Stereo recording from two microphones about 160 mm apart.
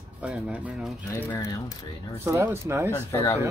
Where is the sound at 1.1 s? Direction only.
20° left (ahead or behind).